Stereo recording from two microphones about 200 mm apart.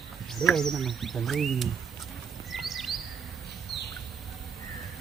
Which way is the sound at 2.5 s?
Centre (ahead or behind).